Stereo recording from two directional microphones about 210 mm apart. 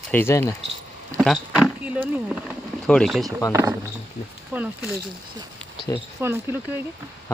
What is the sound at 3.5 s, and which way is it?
Speech, 15° right (ahead or behind).